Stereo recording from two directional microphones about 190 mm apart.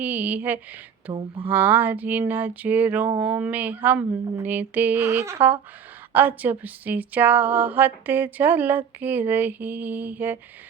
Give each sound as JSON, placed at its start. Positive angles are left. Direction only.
{"t": 0.0, "sound": "speech", "side_deg": -10}
{"t": 1.1, "sound": "speech", "side_deg": -20}
{"t": 1.5, "sound": "speech", "side_deg": -10}